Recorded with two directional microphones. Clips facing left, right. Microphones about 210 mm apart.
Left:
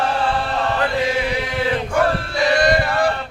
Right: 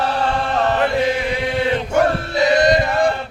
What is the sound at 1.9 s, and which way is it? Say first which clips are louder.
Chant: right 2 dB; 20° right (ahead or behind).